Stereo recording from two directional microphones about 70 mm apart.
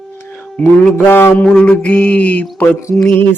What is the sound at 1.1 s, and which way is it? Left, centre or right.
Mantra, left.